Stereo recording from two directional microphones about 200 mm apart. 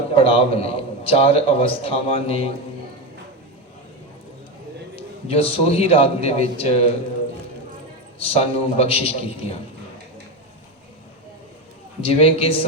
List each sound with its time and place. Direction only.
0.2 s a man's voice: 30° left (ahead or behind)
4.9 s a man's voice: 30° left (ahead or behind)
8.2 s a man's voice: 30° left (ahead or behind)
12.0 s a man's voice: 30° left (ahead or behind)